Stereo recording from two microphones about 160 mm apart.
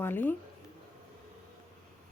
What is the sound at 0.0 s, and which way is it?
Speech, 10° left (ahead or behind).